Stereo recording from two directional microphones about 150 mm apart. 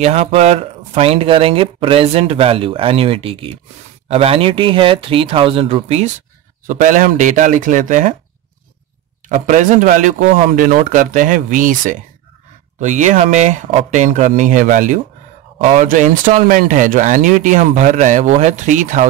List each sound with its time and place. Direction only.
0.0 s speech: 45° right (ahead or behind)
6.7 s speech: 60° right (ahead or behind)
9.3 s speech: 60° right (ahead or behind)